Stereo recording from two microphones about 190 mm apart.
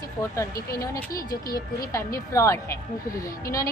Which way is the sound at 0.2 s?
15° left (ahead or behind).